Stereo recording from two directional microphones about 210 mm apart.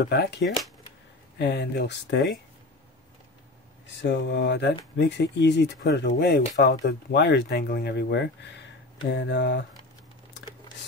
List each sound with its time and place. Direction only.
0.0 s speech: 50° left (ahead or behind)
4.0 s speech: 55° left (ahead or behind)